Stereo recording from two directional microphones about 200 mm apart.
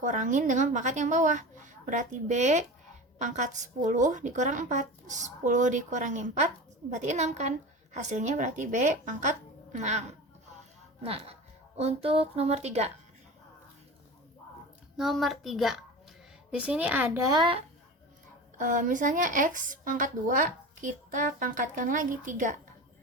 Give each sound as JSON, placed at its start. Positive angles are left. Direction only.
{"t": 0.0, "sound": "speech", "side_deg": -40}
{"t": 11.0, "sound": "speech", "side_deg": -30}
{"t": 14.9, "sound": "a woman's voice", "side_deg": 0}
{"t": 17.3, "sound": "speech", "side_deg": -25}
{"t": 18.5, "sound": "speech", "side_deg": -40}